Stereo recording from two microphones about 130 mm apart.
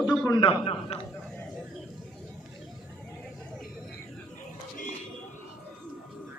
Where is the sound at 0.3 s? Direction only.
40° left (ahead or behind).